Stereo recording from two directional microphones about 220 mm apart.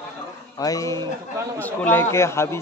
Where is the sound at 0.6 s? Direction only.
15° left (ahead or behind).